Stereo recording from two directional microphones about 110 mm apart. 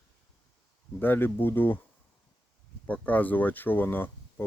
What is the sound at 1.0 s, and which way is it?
Speech, 20° left (ahead or behind).